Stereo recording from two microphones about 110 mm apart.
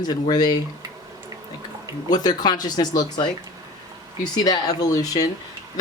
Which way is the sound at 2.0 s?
40° left (ahead or behind).